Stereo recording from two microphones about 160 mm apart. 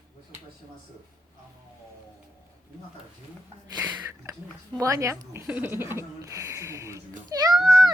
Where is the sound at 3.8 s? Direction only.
15° right (ahead or behind).